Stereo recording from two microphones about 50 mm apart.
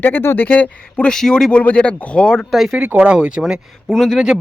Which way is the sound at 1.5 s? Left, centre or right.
Left.